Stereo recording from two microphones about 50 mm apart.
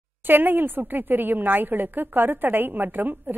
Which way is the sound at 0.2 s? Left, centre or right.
Right.